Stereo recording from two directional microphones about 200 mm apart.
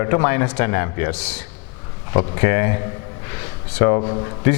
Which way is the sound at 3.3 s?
15° left (ahead or behind).